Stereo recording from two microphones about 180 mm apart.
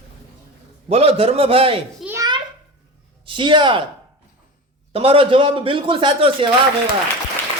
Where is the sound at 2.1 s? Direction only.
25° right (ahead or behind).